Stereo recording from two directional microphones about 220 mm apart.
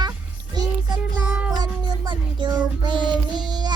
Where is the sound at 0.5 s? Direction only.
20° right (ahead or behind).